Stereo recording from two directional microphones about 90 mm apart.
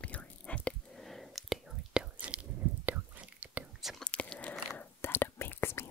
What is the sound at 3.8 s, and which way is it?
Whispering, centre (ahead or behind).